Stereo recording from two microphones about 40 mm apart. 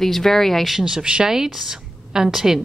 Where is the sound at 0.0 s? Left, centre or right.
Centre.